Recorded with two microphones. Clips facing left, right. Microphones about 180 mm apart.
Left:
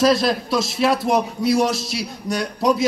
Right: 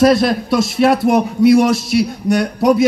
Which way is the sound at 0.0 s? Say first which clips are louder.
Right 5 dB; 55° right (ahead or behind).